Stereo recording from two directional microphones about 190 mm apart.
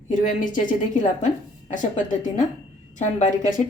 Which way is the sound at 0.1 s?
45° left (ahead or behind).